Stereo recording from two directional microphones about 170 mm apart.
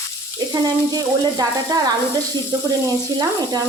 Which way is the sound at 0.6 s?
20° right (ahead or behind).